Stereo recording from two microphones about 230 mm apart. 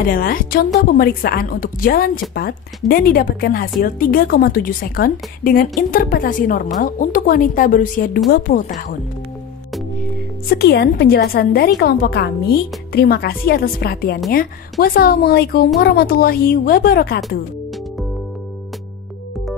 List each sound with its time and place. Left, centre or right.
0.1 s a woman's voice: left
10.5 s a woman's voice: left